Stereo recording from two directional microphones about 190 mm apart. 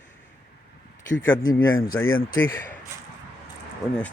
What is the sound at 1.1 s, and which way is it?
Speech, 80° left.